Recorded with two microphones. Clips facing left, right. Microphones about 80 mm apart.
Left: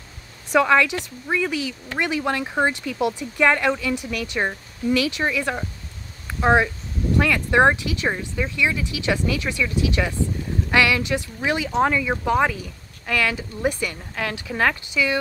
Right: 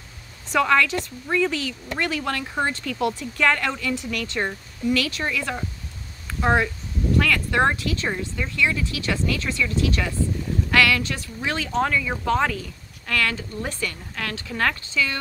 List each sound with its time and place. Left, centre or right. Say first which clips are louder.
0.5 s speech: left 2 dB; centre
6.2 s a sound: left 3 dB; centre
7.2 s speech: left 3 dB; centre